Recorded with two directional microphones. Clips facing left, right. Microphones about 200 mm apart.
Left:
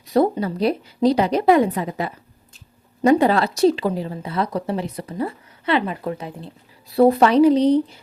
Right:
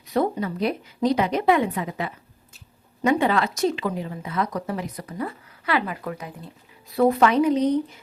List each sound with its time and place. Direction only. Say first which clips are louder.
0.1 s a woman's voice: left 5 dB; 35° left (ahead or behind)